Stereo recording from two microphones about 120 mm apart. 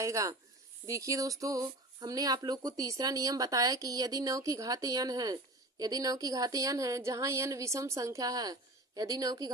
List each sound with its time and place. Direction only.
0.0 s speech: 25° right (ahead or behind)